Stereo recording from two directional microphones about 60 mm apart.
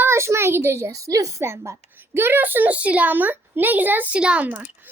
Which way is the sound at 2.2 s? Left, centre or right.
Right.